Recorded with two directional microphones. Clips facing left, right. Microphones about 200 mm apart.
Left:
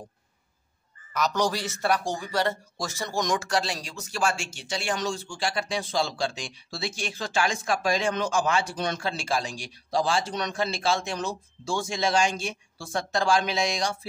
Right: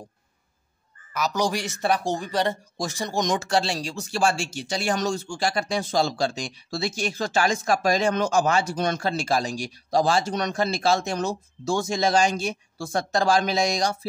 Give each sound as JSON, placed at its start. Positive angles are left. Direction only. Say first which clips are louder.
{"t": 1.1, "sound": "speech", "louder": "right 1 dB", "side_deg": -5}